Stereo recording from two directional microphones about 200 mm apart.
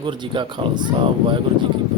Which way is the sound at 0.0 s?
25° right (ahead or behind).